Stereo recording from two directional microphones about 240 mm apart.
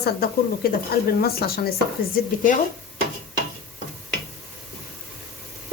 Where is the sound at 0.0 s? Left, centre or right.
Left.